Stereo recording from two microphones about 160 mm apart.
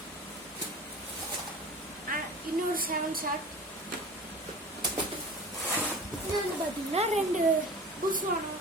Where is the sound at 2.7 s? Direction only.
65° right (ahead or behind).